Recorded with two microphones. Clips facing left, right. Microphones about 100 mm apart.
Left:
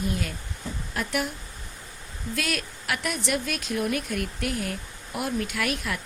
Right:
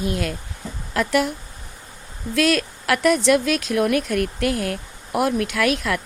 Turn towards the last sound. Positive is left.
turn(degrees=-90)